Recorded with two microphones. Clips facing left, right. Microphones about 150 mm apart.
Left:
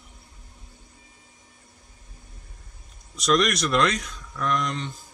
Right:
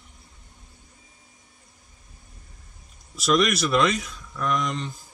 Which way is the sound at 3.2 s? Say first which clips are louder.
Right 1 dB; centre (ahead or behind).